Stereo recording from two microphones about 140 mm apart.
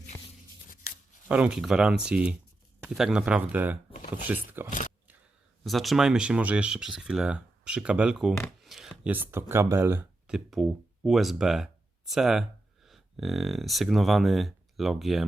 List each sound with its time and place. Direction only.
1.3 s speech: 5° right (ahead or behind)
3.9 s a sound: 65° left (ahead or behind)
4.3 s speech: 15° right (ahead or behind)
5.6 s speech: centre (ahead or behind); by 10.1 s 15° right (ahead or behind)
10.2 s speech: centre (ahead or behind)